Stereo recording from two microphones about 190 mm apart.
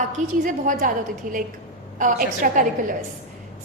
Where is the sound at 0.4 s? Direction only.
45° right (ahead or behind).